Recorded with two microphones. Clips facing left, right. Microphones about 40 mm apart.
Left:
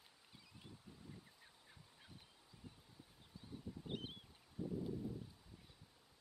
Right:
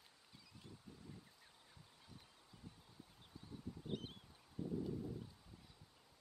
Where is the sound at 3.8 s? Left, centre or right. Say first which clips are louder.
Right 1 dB; centre.